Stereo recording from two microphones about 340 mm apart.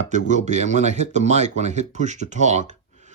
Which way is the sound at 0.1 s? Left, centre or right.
Right.